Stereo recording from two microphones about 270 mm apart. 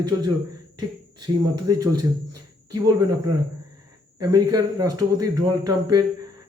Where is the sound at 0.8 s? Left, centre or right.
Centre.